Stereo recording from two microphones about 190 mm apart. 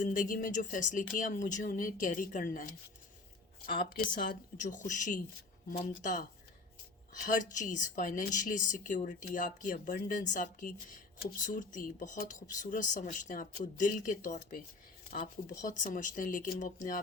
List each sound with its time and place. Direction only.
0.0 s speech: 45° left (ahead or behind)
3.8 s speech: 45° left (ahead or behind)
15.6 s speech: 40° left (ahead or behind)